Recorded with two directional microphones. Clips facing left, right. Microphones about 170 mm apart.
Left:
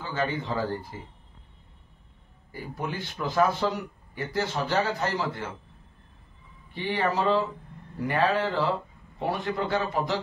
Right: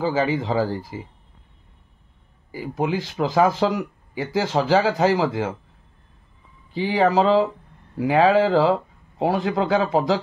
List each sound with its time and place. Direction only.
0.0 s speech: 90° right
2.5 s speech: 90° right
6.7 s speech: 90° right